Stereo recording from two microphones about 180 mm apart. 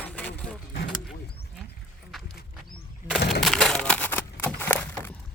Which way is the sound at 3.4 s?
Centre (ahead or behind).